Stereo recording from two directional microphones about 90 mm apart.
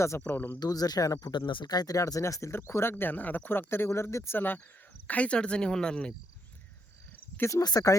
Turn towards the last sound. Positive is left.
turn(degrees=45)  # may be behind; listen again after turning